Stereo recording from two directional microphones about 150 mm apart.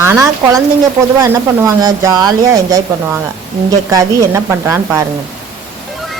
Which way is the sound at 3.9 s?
20° right (ahead or behind).